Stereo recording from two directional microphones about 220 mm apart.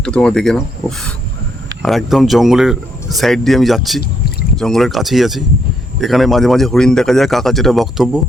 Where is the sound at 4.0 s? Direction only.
45° left (ahead or behind).